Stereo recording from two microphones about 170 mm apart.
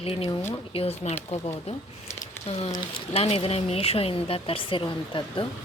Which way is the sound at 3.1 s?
35° left (ahead or behind).